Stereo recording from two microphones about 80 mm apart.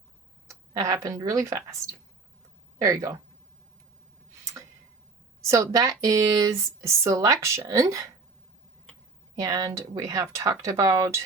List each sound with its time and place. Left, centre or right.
0.8 s speech: right
2.8 s speech: right
5.4 s speech: right
9.3 s speech: right